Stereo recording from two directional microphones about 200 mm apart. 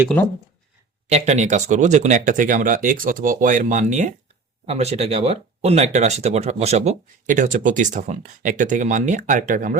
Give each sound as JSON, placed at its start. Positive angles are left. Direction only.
{"t": 1.0, "sound": "speech", "side_deg": -35}